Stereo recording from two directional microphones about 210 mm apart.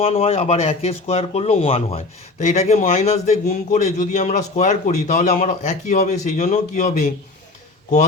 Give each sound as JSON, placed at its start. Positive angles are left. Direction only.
{"t": 0.0, "sound": "speech", "side_deg": 30}